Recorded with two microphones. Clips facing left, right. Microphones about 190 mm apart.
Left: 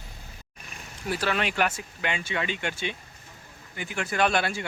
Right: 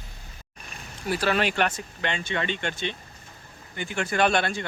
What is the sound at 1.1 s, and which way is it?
Speech, 40° right (ahead or behind).